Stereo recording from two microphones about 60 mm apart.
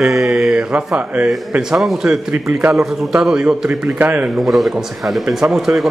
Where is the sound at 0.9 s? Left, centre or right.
Centre.